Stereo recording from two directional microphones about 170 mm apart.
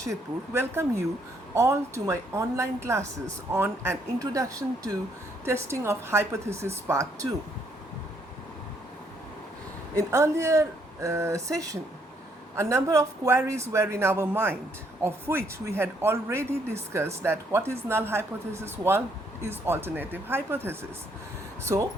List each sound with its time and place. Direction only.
0.1 s a woman's voice: 15° right (ahead or behind)
10.0 s a woman's voice: 15° right (ahead or behind)
21.6 s a woman's voice: 15° right (ahead or behind)